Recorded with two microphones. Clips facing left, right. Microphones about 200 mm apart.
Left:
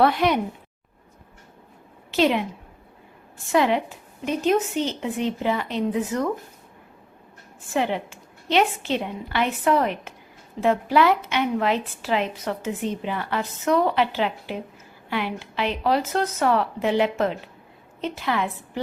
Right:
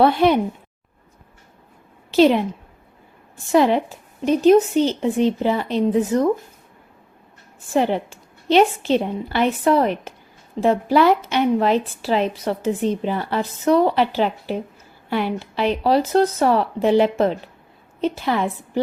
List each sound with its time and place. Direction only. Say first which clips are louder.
0.0 s a woman's voice: right 4 dB; 30° right (ahead or behind)
2.0 s a woman's voice: right 6 dB; 35° right (ahead or behind)
3.5 s a woman's voice: right 4 dB; 35° right (ahead or behind)
7.7 s a woman's voice: right 5 dB; 35° right (ahead or behind)